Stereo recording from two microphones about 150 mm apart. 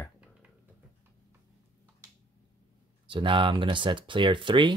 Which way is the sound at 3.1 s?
35° right (ahead or behind).